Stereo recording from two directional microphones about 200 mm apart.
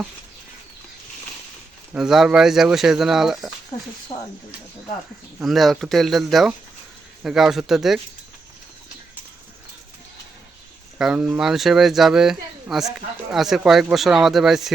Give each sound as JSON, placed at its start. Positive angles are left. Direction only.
{"t": 1.9, "sound": "speech", "side_deg": -5}
{"t": 3.7, "sound": "speech", "side_deg": 25}
{"t": 5.4, "sound": "speech", "side_deg": 0}
{"t": 10.9, "sound": "speech", "side_deg": -5}